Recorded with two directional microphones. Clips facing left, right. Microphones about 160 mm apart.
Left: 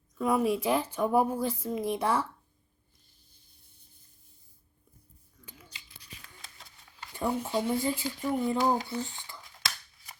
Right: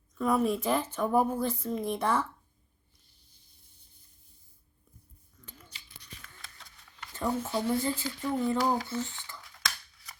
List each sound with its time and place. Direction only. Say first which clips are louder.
0.2 s speech: even; 10° left (ahead or behind)
5.5 s a sound: left 1 dB; 10° left (ahead or behind)
7.1 s speech: left 1 dB; 15° left (ahead or behind)